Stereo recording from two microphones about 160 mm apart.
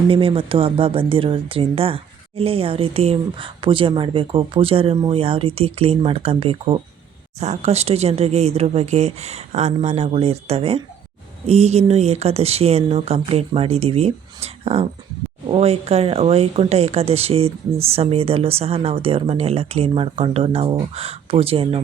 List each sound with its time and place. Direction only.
0.1 s speech: 35° right (ahead or behind)